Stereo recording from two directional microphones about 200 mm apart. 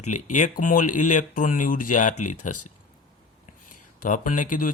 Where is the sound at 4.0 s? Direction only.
40° left (ahead or behind).